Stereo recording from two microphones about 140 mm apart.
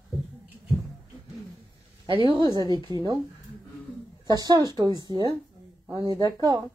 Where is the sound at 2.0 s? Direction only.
35° right (ahead or behind).